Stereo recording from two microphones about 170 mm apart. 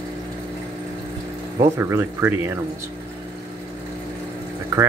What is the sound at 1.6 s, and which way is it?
Speech, 15° right (ahead or behind).